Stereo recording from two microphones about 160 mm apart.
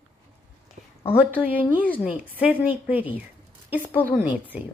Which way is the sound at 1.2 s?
10° right (ahead or behind).